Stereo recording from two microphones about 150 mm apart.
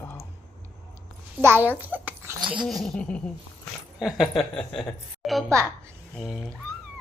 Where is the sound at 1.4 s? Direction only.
15° right (ahead or behind).